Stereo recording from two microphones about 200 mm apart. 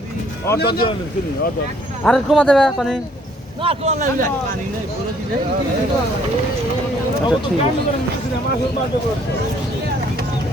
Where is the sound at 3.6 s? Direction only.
30° right (ahead or behind).